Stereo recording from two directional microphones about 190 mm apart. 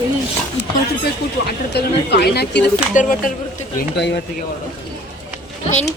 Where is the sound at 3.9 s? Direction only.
65° left (ahead or behind).